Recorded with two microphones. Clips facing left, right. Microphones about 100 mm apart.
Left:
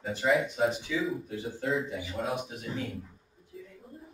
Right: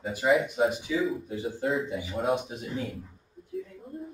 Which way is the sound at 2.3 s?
25° right (ahead or behind).